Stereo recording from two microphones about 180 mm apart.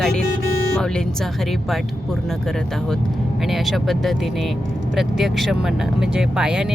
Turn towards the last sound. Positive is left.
turn(degrees=-5)  # may be behind; listen again after turning